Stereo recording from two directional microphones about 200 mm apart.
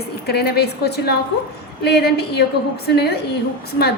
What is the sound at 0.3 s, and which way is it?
A woman's voice, 55° left (ahead or behind).